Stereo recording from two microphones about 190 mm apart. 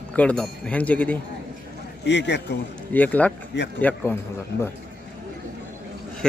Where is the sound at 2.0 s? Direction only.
65° left (ahead or behind).